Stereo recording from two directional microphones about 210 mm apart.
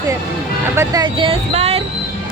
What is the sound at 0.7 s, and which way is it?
Speech, 15° right (ahead or behind).